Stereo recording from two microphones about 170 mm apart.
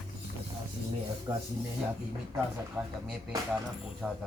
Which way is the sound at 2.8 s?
5° right (ahead or behind).